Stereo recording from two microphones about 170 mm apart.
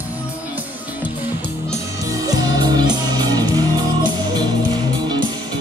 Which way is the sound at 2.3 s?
25° right (ahead or behind).